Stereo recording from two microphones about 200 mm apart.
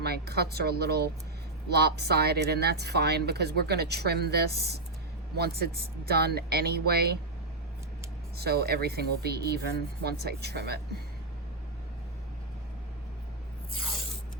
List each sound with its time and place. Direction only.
0.0 s a woman's voice: 55° right (ahead or behind)
8.4 s a woman's voice: 50° right (ahead or behind)